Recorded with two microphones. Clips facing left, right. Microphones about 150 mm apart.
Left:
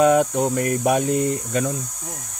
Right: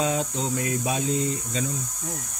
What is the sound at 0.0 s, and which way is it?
Cricket, 60° left (ahead or behind).